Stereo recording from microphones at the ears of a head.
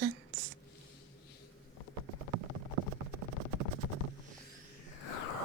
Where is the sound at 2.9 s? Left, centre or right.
Right.